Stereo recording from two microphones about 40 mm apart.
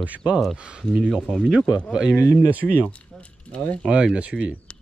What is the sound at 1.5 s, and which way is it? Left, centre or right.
Speech, centre.